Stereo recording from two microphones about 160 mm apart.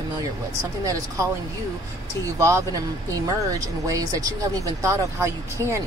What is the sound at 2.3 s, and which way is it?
Speech, 20° right (ahead or behind).